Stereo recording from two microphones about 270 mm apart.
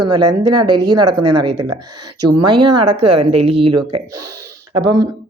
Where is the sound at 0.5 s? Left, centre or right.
Centre.